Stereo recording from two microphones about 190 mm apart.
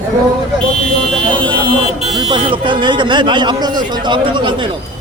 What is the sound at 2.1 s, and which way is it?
Speech, 25° right (ahead or behind).